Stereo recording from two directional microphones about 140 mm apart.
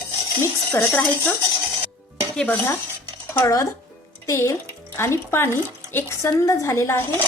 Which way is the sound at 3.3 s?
20° left (ahead or behind).